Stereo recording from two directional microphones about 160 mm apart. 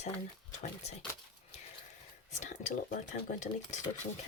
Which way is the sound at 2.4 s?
50° left (ahead or behind).